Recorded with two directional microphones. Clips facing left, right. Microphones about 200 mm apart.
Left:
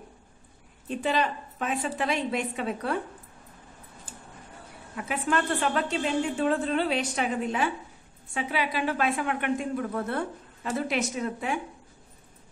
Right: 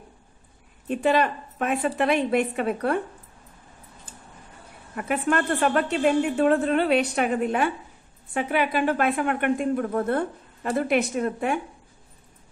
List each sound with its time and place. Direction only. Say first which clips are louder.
0.8 s speech: right 5 dB; 60° right (ahead or behind)
4.9 s a woman's voice: right 4 dB; 55° right (ahead or behind)